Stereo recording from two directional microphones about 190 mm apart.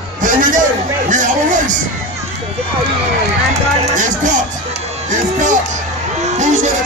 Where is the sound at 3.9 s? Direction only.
40° right (ahead or behind).